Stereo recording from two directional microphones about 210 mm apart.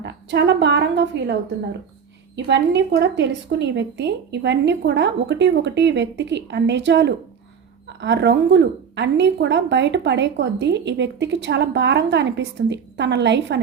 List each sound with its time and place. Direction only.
0.0 s a woman's voice: 55° right (ahead or behind)